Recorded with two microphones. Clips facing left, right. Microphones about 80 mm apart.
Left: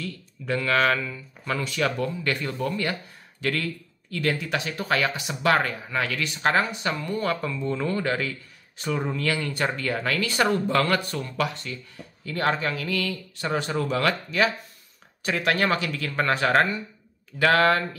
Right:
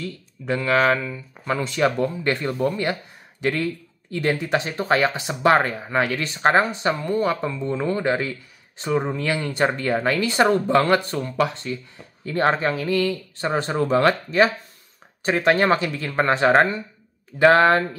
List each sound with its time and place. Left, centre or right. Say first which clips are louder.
0.0 s speech: right 3 dB; right